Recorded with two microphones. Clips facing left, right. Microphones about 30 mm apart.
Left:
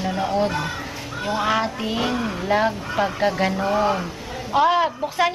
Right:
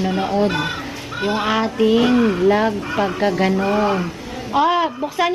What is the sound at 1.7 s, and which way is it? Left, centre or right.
Speech, centre.